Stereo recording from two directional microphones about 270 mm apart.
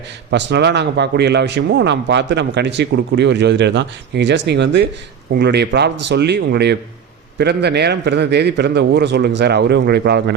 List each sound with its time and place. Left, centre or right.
0.3 s a man's voice: right